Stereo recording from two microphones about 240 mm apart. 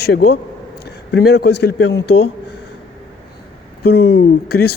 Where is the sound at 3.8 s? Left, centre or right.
Left.